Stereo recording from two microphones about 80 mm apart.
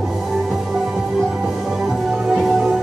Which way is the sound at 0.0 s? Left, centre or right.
Centre.